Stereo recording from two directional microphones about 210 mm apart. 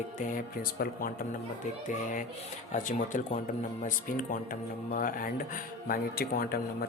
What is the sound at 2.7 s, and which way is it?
Speech, 35° left (ahead or behind).